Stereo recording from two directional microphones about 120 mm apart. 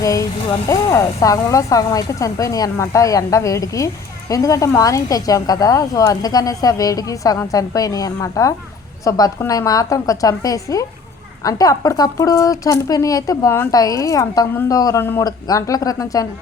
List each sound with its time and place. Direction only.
0.0 s a woman's voice: 30° left (ahead or behind)